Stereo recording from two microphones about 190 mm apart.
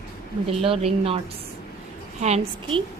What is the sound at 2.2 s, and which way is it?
Speech, 35° right (ahead or behind).